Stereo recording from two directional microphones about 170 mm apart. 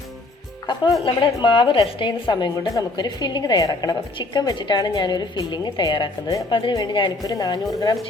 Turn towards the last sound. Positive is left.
turn(degrees=25)  # may be behind; listen again after turning